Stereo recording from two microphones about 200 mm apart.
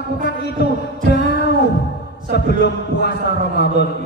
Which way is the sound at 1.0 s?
55° left (ahead or behind).